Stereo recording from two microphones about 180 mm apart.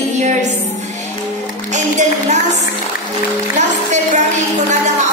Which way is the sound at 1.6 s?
40° right (ahead or behind).